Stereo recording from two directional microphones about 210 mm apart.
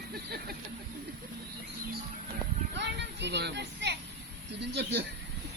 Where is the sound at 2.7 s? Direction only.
55° right (ahead or behind).